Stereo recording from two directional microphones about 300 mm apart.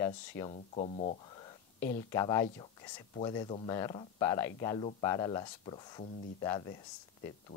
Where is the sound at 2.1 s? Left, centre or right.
Centre.